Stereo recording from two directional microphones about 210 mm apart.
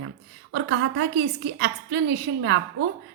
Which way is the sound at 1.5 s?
55° right (ahead or behind).